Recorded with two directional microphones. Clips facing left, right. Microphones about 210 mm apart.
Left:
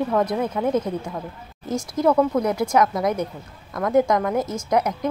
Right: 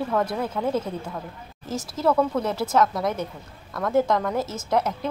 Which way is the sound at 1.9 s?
15° left (ahead or behind).